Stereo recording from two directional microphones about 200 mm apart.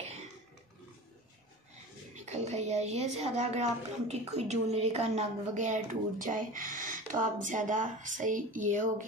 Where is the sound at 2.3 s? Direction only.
35° right (ahead or behind).